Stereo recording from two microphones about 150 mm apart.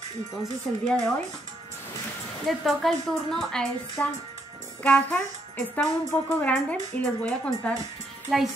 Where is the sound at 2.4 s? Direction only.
Centre (ahead or behind).